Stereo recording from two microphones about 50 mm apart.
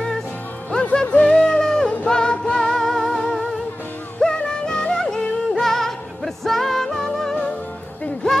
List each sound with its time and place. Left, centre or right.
1.0 s music: left
1.3 s music: centre